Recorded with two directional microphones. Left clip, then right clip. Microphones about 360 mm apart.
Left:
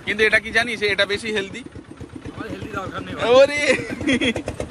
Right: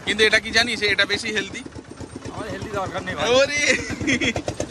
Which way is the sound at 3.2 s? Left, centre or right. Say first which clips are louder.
Left 4 dB; centre.